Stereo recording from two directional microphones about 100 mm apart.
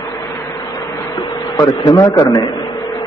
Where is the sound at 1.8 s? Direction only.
40° left (ahead or behind).